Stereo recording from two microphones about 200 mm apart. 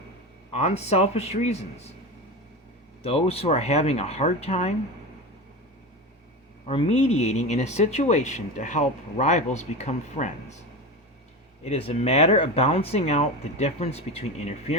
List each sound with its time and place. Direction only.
0.5 s speech: 35° left (ahead or behind)
3.0 s speech: 30° left (ahead or behind)
6.7 s speech: 30° left (ahead or behind)
11.6 s speech: 30° left (ahead or behind)